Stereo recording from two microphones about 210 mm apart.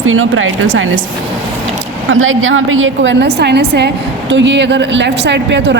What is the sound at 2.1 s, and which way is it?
A woman's voice, 70° right (ahead or behind).